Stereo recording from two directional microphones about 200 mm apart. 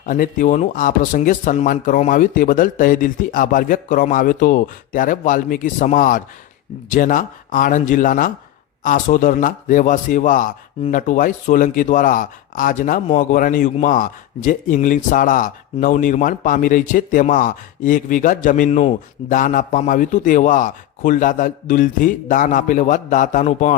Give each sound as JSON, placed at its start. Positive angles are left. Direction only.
{"t": 0.0, "sound": "speech", "side_deg": 40}